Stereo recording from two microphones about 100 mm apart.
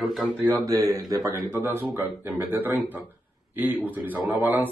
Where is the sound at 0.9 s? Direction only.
40° right (ahead or behind).